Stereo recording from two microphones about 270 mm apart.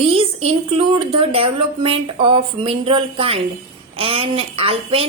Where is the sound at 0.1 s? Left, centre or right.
Right.